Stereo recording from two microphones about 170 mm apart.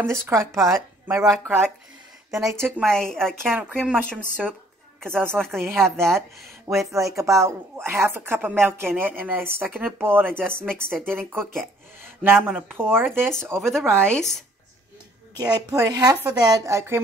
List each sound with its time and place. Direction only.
0.0 s speech: 15° right (ahead or behind)
2.5 s speech: 15° right (ahead or behind)
3.1 s speech: 5° left (ahead or behind)
3.5 s speech: 10° right (ahead or behind)
5.3 s speech: centre (ahead or behind)
6.9 s speech: 15° right (ahead or behind)
12.4 s speech: centre (ahead or behind)
12.7 s speech: 10° right (ahead or behind)
13.6 s speech: centre (ahead or behind)
15.3 s a woman's voice: 25° right (ahead or behind)